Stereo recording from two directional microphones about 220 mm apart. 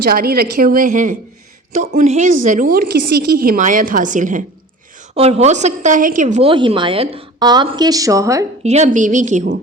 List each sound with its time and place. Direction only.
0.0 s a woman's voice: 45° right (ahead or behind); by 8.4 s 15° right (ahead or behind)
8.6 s a woman's voice: 30° right (ahead or behind)